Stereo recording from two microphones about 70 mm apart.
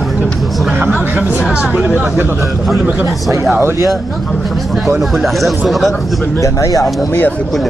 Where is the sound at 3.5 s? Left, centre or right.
Right.